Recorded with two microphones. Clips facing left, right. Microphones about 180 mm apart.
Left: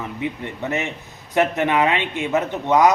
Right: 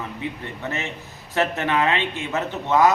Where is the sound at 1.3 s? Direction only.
15° left (ahead or behind).